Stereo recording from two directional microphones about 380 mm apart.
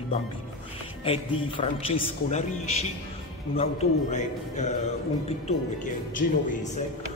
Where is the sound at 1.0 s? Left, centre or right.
Centre.